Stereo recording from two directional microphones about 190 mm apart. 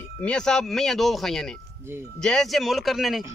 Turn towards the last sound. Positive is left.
turn(degrees=0)  # may be behind; listen again after turning